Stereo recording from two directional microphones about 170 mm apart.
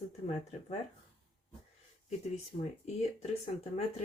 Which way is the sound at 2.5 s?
40° left (ahead or behind).